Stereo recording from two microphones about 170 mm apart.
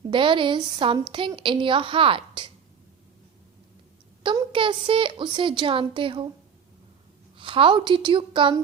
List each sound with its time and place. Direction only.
0.1 s a woman's voice: 30° right (ahead or behind)
4.2 s a woman's voice: 30° right (ahead or behind)
7.3 s a woman's voice: 30° right (ahead or behind)